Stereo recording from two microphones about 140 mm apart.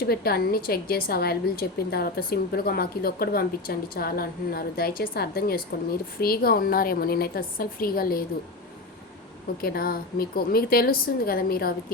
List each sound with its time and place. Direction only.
0.0 s a woman's voice: 90° left
9.6 s a woman's voice: 90° left